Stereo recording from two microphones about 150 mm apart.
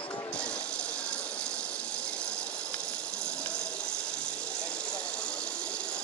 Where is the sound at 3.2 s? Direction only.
5° left (ahead or behind).